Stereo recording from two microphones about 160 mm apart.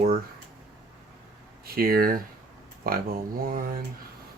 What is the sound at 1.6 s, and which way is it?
Speech, 70° right (ahead or behind).